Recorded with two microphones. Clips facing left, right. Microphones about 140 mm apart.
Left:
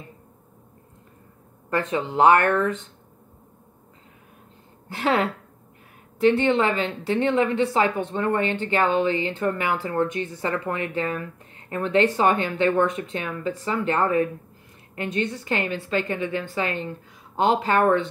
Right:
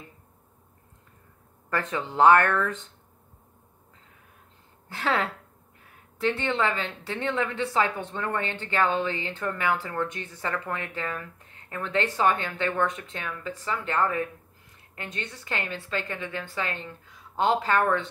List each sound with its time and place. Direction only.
1.7 s speech: 20° left (ahead or behind)
4.8 s speech: 15° left (ahead or behind)